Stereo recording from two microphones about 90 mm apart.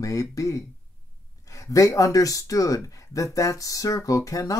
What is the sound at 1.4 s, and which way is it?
Speech, 40° left (ahead or behind).